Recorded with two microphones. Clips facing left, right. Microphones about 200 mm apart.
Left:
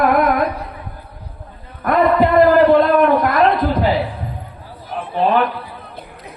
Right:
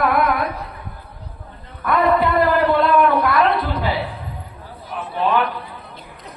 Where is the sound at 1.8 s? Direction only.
45° left (ahead or behind).